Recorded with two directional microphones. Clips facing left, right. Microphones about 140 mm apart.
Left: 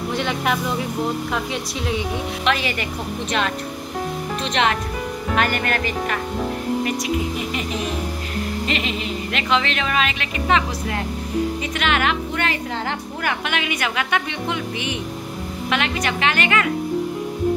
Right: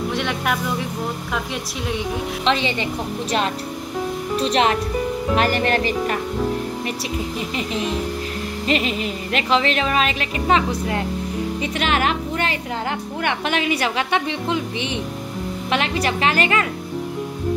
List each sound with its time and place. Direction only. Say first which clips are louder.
0.1 s speech: left 5 dB; centre (ahead or behind)
2.4 s a woman's voice: right 2 dB; 25° right (ahead or behind)
4.4 s speech: right 3 dB; 35° right (ahead or behind)
8.6 s speech: right 3 dB; 40° right (ahead or behind)